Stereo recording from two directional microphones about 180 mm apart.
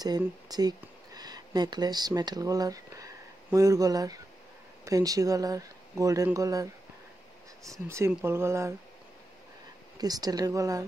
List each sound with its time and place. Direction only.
0.5 s speech: 20° right (ahead or behind)
9.9 s speech: 20° right (ahead or behind)